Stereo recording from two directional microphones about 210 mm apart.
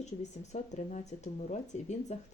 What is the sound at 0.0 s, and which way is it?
Speech, 35° left (ahead or behind).